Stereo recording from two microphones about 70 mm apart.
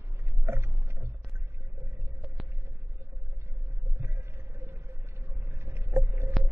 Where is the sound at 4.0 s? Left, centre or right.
Right.